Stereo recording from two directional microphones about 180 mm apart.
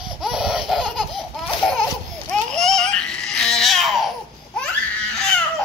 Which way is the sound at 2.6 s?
5° left (ahead or behind).